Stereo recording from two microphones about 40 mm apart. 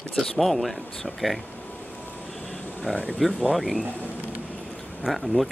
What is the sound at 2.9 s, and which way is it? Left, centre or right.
Speech, centre.